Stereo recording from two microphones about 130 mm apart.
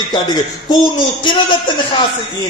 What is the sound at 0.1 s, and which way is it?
Speech, 35° left (ahead or behind).